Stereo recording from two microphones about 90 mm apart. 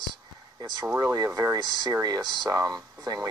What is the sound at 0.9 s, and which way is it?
Speech, 40° right (ahead or behind).